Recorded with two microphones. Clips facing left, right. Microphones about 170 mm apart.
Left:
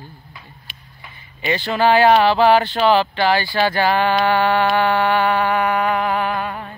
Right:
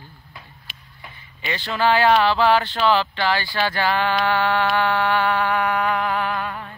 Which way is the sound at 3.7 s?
45° left (ahead or behind).